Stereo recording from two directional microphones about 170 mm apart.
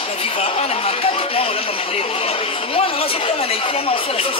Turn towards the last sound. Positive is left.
turn(degrees=35)  # may be behind; listen again after turning